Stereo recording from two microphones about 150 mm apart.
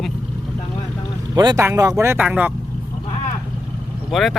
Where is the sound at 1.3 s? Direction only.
25° right (ahead or behind).